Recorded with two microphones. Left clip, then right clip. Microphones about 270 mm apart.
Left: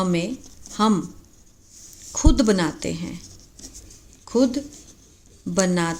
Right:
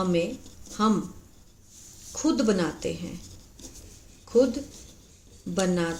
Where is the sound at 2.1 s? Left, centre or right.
Left.